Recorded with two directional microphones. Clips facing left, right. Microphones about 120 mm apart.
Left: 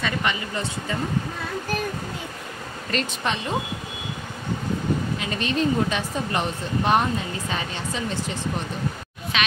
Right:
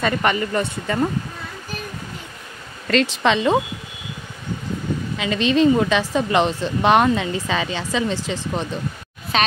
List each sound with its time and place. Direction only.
0.0 s speech: 50° right (ahead or behind)
2.9 s speech: 90° right
5.2 s speech: 90° right
9.3 s speech: 35° right (ahead or behind)